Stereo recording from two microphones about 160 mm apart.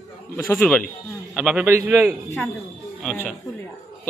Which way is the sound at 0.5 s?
10° left (ahead or behind).